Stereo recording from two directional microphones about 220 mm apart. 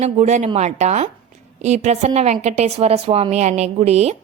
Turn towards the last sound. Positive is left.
turn(degrees=-30)  # may be behind; listen again after turning